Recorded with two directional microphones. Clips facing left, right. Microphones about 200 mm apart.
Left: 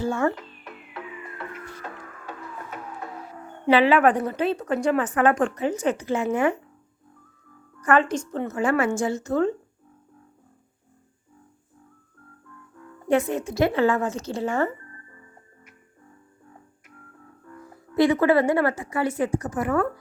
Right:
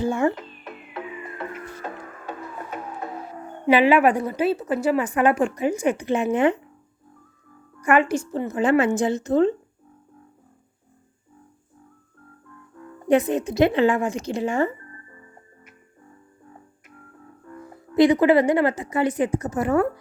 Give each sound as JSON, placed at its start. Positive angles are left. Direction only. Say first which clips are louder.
{"t": 0.0, "sound": "a sound", "louder": "right 2 dB", "side_deg": -15}
{"t": 3.7, "sound": "speech", "louder": "right 1 dB", "side_deg": -15}
{"t": 7.8, "sound": "speech", "louder": "right 2 dB", "side_deg": -10}
{"t": 12.7, "sound": "speech", "louder": "right 3 dB", "side_deg": -25}
{"t": 14.8, "sound": "music", "louder": "right 3 dB", "side_deg": -25}
{"t": 17.4, "sound": "speech", "louder": "right 4 dB", "side_deg": -25}